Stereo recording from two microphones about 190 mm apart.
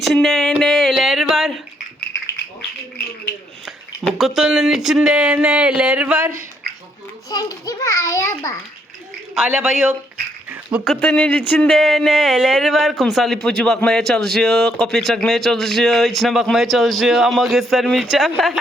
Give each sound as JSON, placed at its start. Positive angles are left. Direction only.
{"t": 0.0, "sound": "a sound", "side_deg": 0}
{"t": 4.2, "sound": "speech", "side_deg": 0}
{"t": 7.3, "sound": "a child's voice", "side_deg": 20}
{"t": 9.3, "sound": "speech", "side_deg": -5}
{"t": 10.5, "sound": "a sound", "side_deg": -5}
{"t": 11.0, "sound": "speech", "side_deg": 5}